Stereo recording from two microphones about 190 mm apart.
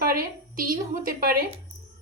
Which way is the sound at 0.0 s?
50° right (ahead or behind).